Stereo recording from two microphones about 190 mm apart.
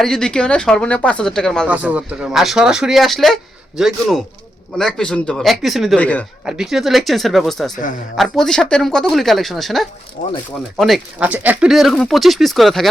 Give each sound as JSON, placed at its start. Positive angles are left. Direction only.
{"t": 0.0, "sound": "speech", "side_deg": 5}
{"t": 1.6, "sound": "speech", "side_deg": -5}
{"t": 10.2, "sound": "speech", "side_deg": 45}
{"t": 10.8, "sound": "speech", "side_deg": 0}